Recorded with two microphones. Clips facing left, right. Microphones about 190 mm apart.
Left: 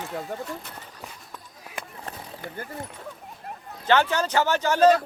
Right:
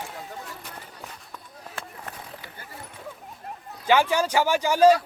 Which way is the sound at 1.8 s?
15° left (ahead or behind).